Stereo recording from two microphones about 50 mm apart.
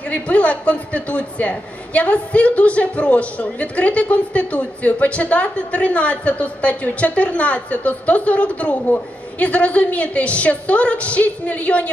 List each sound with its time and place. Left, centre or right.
0.1 s speech: left